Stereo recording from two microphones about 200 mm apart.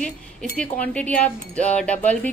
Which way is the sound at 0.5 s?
5° left (ahead or behind).